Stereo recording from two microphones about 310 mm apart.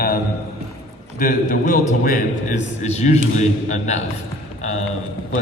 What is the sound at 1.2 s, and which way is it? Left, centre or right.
A man's voice, left.